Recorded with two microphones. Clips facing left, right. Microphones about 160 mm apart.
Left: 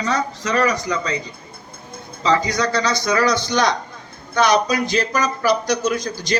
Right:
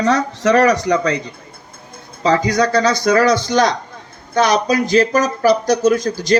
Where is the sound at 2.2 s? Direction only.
55° right (ahead or behind).